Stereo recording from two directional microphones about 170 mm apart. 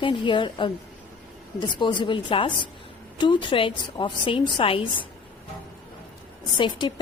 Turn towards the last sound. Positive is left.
turn(degrees=25)  # may be behind; listen again after turning